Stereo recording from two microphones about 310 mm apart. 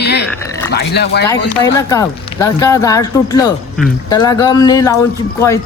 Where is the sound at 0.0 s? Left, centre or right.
Left.